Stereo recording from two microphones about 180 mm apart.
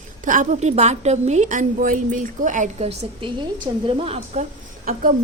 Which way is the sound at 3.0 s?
30° right (ahead or behind).